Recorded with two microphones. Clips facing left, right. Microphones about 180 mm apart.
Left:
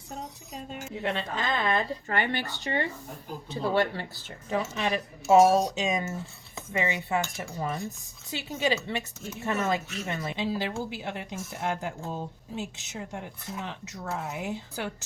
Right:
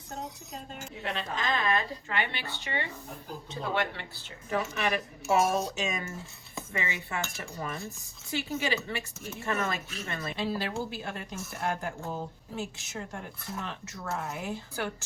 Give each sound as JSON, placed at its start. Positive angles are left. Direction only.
{"t": 1.0, "sound": "speech", "side_deg": 30}
{"t": 2.0, "sound": "speech", "side_deg": 45}
{"t": 4.4, "sound": "speech", "side_deg": 20}